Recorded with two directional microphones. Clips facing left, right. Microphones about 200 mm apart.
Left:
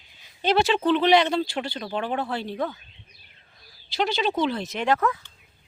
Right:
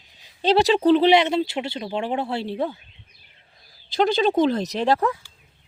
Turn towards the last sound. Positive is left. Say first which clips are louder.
# right 3 dB
turn(degrees=-35)  # may be behind; listen again after turning